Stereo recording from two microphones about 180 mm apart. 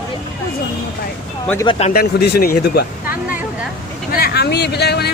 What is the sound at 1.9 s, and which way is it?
Speech, 60° left (ahead or behind).